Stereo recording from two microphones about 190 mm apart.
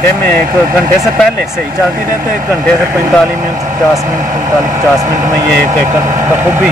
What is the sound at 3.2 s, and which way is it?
Speech, 15° right (ahead or behind).